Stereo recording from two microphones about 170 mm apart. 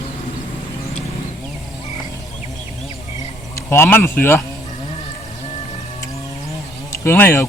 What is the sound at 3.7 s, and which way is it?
Speech, 15° left (ahead or behind).